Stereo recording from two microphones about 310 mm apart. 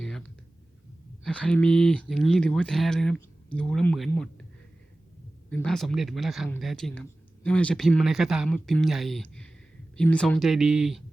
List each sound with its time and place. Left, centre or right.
0.0 s a sound: centre
1.2 s speech: centre
5.5 s speech: centre